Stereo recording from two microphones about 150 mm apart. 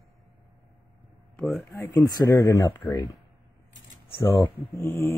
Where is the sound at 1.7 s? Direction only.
25° left (ahead or behind).